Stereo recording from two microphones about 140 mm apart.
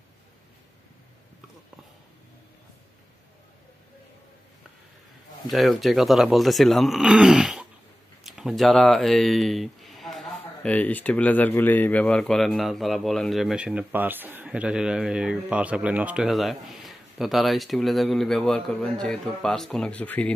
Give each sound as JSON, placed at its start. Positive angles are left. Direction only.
{"t": 5.5, "sound": "speech", "side_deg": 0}